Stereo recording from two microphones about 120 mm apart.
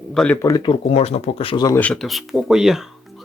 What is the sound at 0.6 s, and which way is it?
Speech, 50° left (ahead or behind).